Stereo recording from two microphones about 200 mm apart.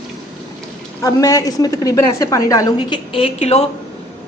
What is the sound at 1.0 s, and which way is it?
A woman's voice, 15° left (ahead or behind).